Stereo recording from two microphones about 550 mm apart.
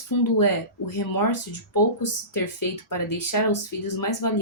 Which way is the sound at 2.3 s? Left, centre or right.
Left.